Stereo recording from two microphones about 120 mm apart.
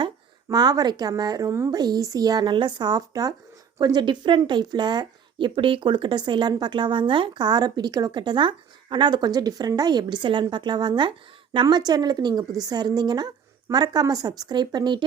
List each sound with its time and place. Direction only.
0.0 s speech: 35° right (ahead or behind)